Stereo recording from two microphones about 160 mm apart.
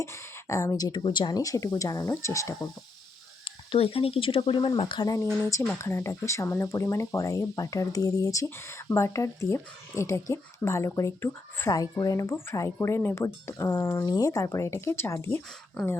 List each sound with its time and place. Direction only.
0.0 s speech: 20° left (ahead or behind)
3.7 s speech: 35° left (ahead or behind); by 15.4 s 15° left (ahead or behind)